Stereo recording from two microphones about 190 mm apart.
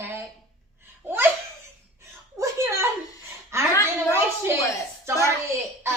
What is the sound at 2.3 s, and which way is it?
Speech, 15° right (ahead or behind).